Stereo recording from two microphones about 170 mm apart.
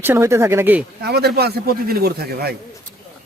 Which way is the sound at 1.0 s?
70° right (ahead or behind).